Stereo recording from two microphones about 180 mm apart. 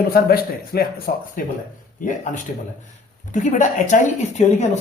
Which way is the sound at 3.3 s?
45° left (ahead or behind).